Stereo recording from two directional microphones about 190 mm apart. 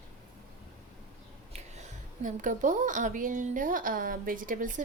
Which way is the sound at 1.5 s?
40° right (ahead or behind).